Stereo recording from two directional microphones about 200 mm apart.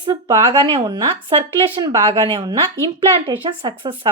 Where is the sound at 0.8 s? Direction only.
25° right (ahead or behind).